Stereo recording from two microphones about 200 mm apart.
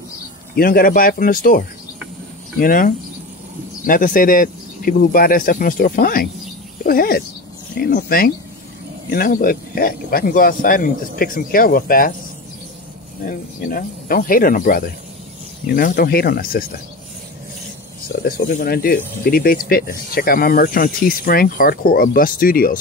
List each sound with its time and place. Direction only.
0.6 s speech: 45° left (ahead or behind)
2.6 s speech: 45° left (ahead or behind)
13.2 s speech: 45° left (ahead or behind)
18.0 s speech: 50° left (ahead or behind)